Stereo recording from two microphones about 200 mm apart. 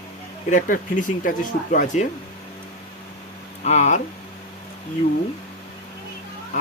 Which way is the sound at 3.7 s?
35° left (ahead or behind).